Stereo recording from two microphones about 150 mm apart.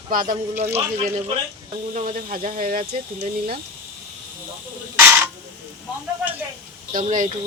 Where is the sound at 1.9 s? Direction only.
65° right (ahead or behind).